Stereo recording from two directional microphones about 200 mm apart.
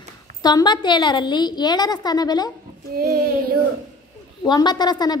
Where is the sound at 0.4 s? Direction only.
20° left (ahead or behind).